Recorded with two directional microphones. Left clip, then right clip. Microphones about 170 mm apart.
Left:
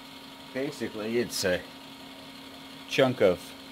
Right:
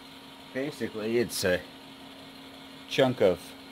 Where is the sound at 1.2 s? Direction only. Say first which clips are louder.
Even; 50° right (ahead or behind).